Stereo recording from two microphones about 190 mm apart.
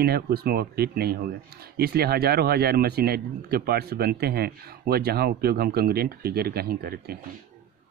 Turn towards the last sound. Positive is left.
turn(degrees=-55)  # may be behind; listen again after turning